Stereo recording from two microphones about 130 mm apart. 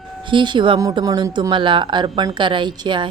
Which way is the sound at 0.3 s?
40° right (ahead or behind).